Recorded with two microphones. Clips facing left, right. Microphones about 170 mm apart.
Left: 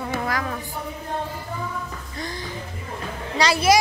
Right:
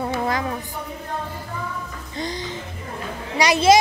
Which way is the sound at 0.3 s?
25° right (ahead or behind).